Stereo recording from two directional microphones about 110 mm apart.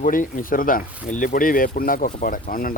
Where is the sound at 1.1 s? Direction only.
90° left.